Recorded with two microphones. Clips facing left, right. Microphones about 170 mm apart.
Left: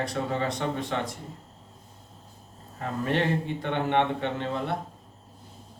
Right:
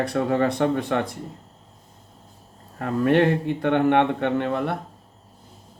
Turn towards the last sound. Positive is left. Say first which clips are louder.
# right 6 dB
turn(degrees=-60)  # may be behind; listen again after turning